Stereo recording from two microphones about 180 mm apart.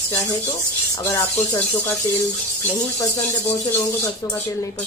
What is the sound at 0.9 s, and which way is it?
Speech, 15° left (ahead or behind).